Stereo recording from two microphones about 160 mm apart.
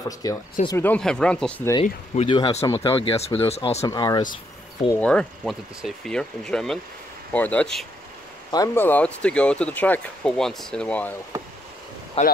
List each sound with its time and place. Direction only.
0.0 s speech: 20° left (ahead or behind)
2.1 s speech: 30° left (ahead or behind)
3.8 s speech: 25° left (ahead or behind)
4.9 s speech: 5° left (ahead or behind)
12.2 s speech: 40° left (ahead or behind)